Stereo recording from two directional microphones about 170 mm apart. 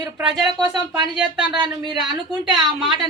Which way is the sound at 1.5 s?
25° right (ahead or behind).